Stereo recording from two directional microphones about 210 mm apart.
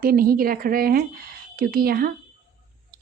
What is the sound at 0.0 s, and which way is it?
Speech, 45° right (ahead or behind).